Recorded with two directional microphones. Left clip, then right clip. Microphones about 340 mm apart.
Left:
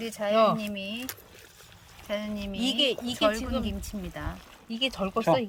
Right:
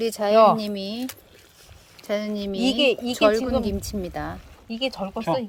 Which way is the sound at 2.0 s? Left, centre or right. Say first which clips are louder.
Right 6 dB; centre.